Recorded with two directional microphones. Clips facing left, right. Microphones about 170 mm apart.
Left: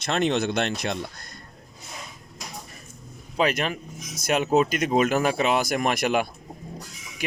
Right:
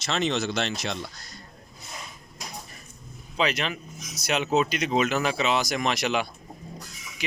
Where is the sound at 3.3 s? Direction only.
50° left (ahead or behind).